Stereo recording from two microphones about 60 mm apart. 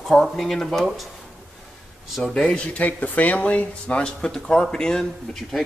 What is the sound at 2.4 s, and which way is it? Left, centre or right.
Speech, left.